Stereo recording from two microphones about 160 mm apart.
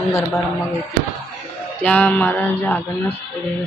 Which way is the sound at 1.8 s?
10° left (ahead or behind).